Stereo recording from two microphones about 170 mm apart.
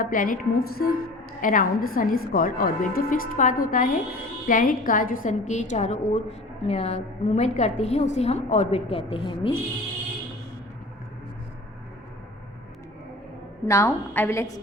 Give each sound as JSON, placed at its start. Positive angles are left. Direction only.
{"t": 0.0, "sound": "a woman's voice", "side_deg": 55}
{"t": 1.4, "sound": "a woman's voice", "side_deg": 50}
{"t": 13.7, "sound": "a woman's voice", "side_deg": 15}